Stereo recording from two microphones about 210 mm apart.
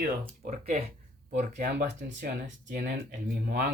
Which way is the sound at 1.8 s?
55° right (ahead or behind).